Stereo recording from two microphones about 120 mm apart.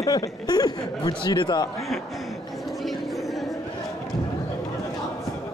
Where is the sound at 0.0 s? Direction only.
30° left (ahead or behind).